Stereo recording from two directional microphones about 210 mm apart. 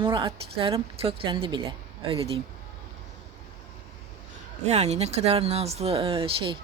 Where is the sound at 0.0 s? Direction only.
25° right (ahead or behind).